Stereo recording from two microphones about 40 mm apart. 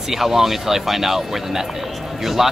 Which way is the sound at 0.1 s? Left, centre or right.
Centre.